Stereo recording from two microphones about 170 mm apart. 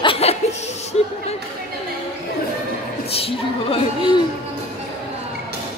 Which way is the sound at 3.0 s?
35° left (ahead or behind).